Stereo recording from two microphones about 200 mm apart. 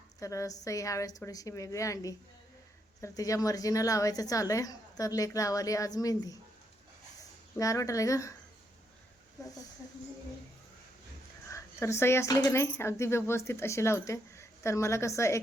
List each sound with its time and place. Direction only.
0.2 s speech: 15° left (ahead or behind)
7.5 s speech: 15° left (ahead or behind)
11.5 s speech: 15° left (ahead or behind)